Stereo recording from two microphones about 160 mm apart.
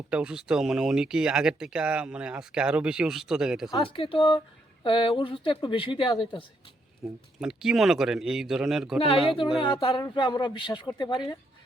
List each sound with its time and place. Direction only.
0.1 s speech: 5° right (ahead or behind)
3.7 s speech: 35° left (ahead or behind)
7.0 s speech: 5° right (ahead or behind)
9.0 s speech: 35° left (ahead or behind)
9.9 s a woman's voice: 25° left (ahead or behind)